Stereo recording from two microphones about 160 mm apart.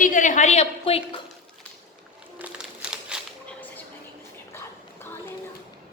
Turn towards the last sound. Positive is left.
turn(degrees=15)  # may be behind; listen again after turning